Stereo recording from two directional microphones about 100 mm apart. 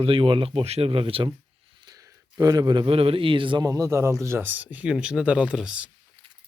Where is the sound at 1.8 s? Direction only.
35° right (ahead or behind).